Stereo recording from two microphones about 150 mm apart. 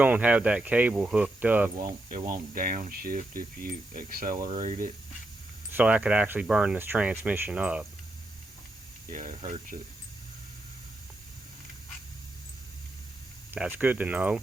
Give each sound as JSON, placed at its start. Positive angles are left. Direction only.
{"t": 0.0, "sound": "speech", "side_deg": -10}
{"t": 2.0, "sound": "speech", "side_deg": -65}
{"t": 4.6, "sound": "speech", "side_deg": -55}
{"t": 5.7, "sound": "speech", "side_deg": -10}
{"t": 9.1, "sound": "speech", "side_deg": -55}
{"t": 13.5, "sound": "speech", "side_deg": -10}